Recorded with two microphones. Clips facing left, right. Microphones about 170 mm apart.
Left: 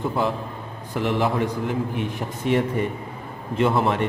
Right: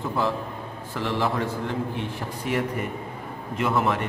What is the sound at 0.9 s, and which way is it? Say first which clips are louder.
A man's voice: left 4 dB; 15° left (ahead or behind).